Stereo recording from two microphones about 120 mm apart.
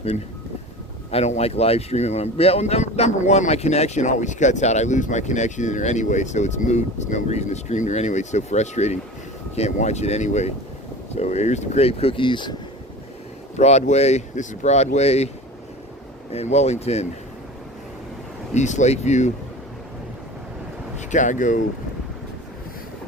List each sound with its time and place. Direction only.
1.1 s speech: 65° left (ahead or behind); by 12.5 s 40° left (ahead or behind)
13.6 s speech: 70° left (ahead or behind)
16.3 s speech: 65° left (ahead or behind)
18.5 s speech: 80° left
21.1 s speech: 90° left